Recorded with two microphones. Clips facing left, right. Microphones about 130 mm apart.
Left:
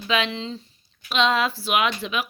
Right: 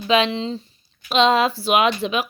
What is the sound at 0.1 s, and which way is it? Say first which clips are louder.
A woman's voice: right 6 dB; 25° right (ahead or behind).